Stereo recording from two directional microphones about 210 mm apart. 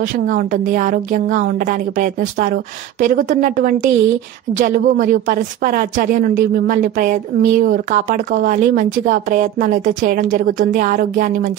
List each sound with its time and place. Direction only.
0.0 s a woman's voice: 40° right (ahead or behind)